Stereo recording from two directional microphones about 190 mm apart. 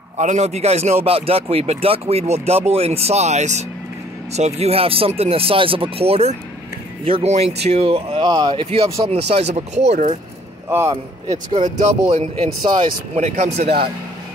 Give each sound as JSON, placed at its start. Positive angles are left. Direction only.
{"t": 0.2, "sound": "speech", "side_deg": -35}
{"t": 10.7, "sound": "a man's voice", "side_deg": -15}
{"t": 11.2, "sound": "speech", "side_deg": -35}
{"t": 12.6, "sound": "speech", "side_deg": -25}
{"t": 13.2, "sound": "speech", "side_deg": -35}